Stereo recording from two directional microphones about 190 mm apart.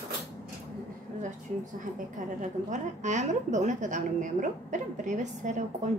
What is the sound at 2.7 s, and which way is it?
A woman's voice, 40° right (ahead or behind).